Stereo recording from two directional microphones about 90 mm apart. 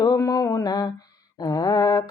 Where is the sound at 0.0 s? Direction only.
45° left (ahead or behind).